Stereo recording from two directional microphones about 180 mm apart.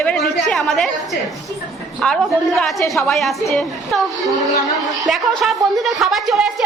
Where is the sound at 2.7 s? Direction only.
15° left (ahead or behind).